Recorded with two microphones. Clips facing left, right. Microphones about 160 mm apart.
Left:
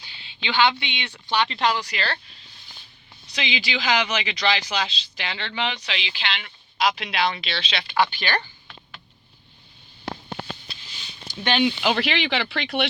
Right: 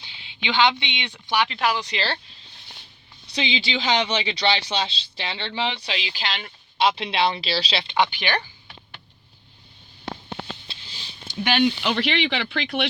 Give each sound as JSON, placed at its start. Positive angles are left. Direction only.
{"t": 0.0, "sound": "speech", "side_deg": -20}
{"t": 1.5, "sound": "speech", "side_deg": 0}
{"t": 1.7, "sound": "speech", "side_deg": -25}
{"t": 3.3, "sound": "speech", "side_deg": -30}
{"t": 10.7, "sound": "a sound", "side_deg": -30}
{"t": 11.4, "sound": "speech", "side_deg": 0}